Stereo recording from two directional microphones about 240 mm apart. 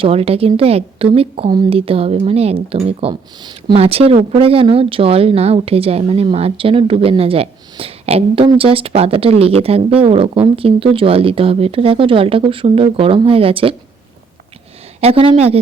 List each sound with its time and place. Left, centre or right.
0.0 s a woman's voice: right
15.0 s a woman's voice: right